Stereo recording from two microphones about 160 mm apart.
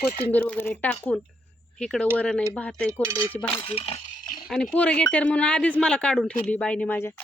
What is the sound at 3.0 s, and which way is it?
Speech, 20° right (ahead or behind).